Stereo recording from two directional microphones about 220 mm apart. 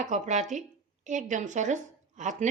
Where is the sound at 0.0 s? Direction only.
35° right (ahead or behind).